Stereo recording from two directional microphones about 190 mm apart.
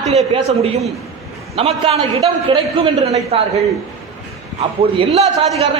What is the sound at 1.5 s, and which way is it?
A man's voice, 30° right (ahead or behind).